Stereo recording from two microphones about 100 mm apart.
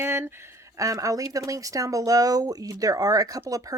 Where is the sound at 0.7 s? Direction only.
35° right (ahead or behind).